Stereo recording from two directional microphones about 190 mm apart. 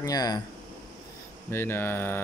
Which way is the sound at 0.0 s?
20° left (ahead or behind).